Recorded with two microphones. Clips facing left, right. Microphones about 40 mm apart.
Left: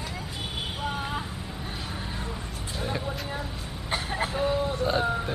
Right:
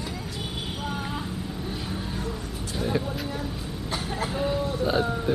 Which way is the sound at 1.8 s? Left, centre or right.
Centre.